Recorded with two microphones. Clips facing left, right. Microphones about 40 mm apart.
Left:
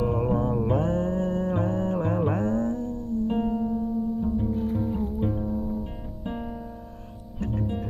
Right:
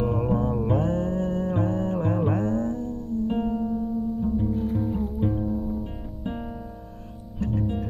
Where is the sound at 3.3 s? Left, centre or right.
Centre.